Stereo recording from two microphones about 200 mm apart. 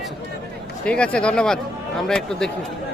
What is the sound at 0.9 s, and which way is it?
Speech, 5° left (ahead or behind).